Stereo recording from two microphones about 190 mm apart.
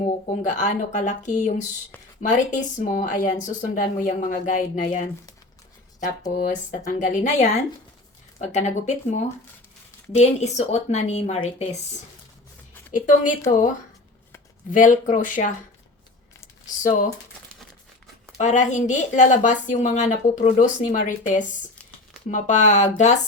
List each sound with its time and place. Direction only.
0.3 s speech: 40° left (ahead or behind)
6.3 s speech: 40° left (ahead or behind)
10.2 s speech: 35° left (ahead or behind)
12.9 s speech: 45° left (ahead or behind)
14.7 s speech: 40° left (ahead or behind)
18.3 s speech: 40° left (ahead or behind)